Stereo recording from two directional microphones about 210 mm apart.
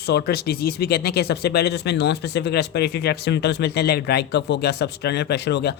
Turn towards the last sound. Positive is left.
turn(degrees=50)  # may be behind; listen again after turning